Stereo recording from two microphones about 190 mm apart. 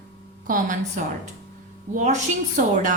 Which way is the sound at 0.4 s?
45° right (ahead or behind).